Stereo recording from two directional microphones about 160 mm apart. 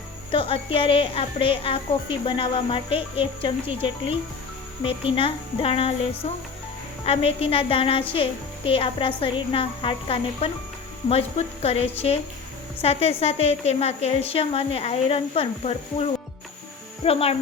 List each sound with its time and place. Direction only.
0.3 s speech: 35° left (ahead or behind)
7.0 s speech: 40° left (ahead or behind)